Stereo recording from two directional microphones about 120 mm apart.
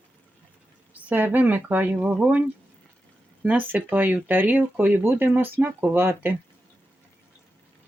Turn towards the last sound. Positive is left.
turn(degrees=-15)  # may be behind; listen again after turning